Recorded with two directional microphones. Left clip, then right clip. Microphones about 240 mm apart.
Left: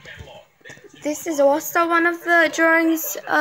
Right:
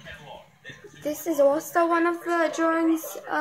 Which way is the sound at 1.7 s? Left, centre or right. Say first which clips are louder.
Left 4 dB; left.